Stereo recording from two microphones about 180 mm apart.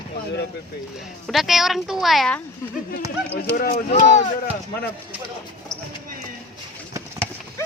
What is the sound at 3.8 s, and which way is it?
Speech, 40° left (ahead or behind).